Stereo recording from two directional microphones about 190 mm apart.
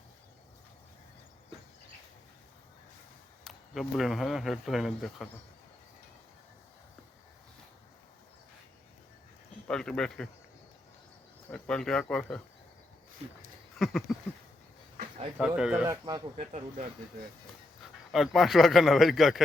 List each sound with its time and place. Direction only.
3.4 s speech: centre (ahead or behind)
9.6 s speech: 5° left (ahead or behind)
11.5 s speech: 5° left (ahead or behind)
13.7 s speech: centre (ahead or behind)
15.4 s speech: 5° right (ahead or behind)
15.9 s speech: 20° right (ahead or behind)
16.4 s speech: 35° right (ahead or behind)
18.1 s speech: centre (ahead or behind)